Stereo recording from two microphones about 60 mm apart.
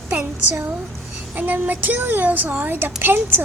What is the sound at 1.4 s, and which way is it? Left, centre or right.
A woman's voice, right.